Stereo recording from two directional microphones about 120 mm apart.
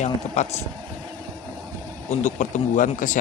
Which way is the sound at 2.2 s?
85° left.